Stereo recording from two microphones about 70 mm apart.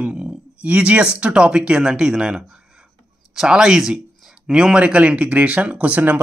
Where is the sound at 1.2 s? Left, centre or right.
Centre.